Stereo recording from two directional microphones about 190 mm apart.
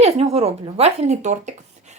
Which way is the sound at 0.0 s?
35° right (ahead or behind).